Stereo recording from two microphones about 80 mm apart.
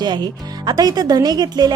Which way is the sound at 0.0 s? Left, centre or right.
Right.